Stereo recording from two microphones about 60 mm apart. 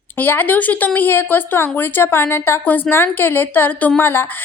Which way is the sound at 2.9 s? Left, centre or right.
Left.